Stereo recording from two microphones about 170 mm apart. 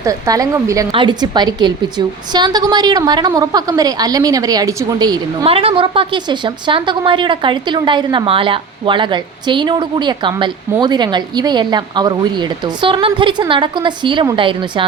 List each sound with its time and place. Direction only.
0.0 s a woman's voice: 20° right (ahead or behind)